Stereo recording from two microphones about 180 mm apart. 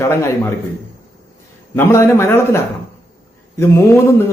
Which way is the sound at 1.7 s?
15° left (ahead or behind).